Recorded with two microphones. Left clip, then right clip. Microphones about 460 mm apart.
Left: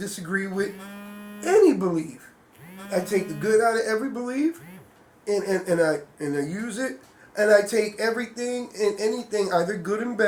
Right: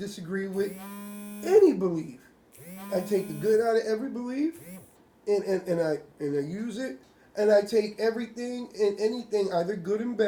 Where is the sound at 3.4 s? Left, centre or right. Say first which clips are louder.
Left 3 dB; right.